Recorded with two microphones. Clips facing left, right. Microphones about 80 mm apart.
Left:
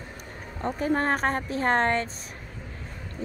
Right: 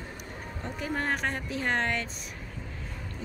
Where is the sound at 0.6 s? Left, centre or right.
Left.